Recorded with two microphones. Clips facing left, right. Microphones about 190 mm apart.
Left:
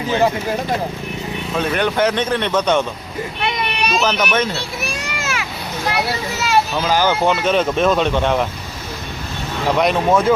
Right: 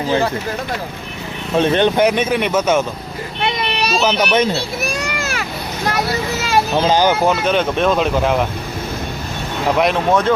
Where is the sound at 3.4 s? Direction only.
25° right (ahead or behind).